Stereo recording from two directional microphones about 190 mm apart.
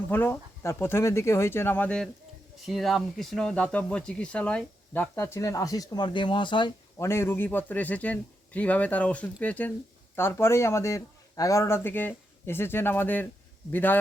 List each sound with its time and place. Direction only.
0.1 s speech: 10° left (ahead or behind)
5.1 s speech: 15° left (ahead or behind)
7.1 s speech: 10° left (ahead or behind)